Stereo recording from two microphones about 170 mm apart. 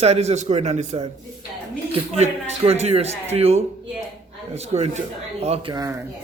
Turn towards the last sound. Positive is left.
turn(degrees=-20)  # may be behind; listen again after turning